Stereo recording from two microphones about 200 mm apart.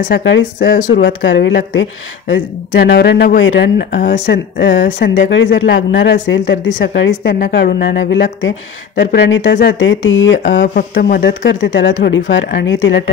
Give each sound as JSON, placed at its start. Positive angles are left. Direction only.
{"t": 0.0, "sound": "speech", "side_deg": 55}
{"t": 0.6, "sound": "speech", "side_deg": 40}
{"t": 1.0, "sound": "speech", "side_deg": 60}
{"t": 3.9, "sound": "speech", "side_deg": 40}
{"t": 4.6, "sound": "speech", "side_deg": 60}
{"t": 4.8, "sound": "speech", "side_deg": 40}
{"t": 5.1, "sound": "speech", "side_deg": 65}
{"t": 7.3, "sound": "speech", "side_deg": 45}
{"t": 10.7, "sound": "speech", "side_deg": 50}